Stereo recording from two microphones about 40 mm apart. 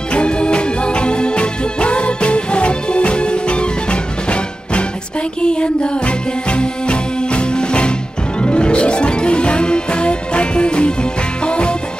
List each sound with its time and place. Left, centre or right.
0.1 s music: left